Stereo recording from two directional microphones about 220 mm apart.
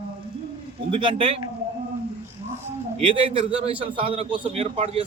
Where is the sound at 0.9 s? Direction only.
25° right (ahead or behind).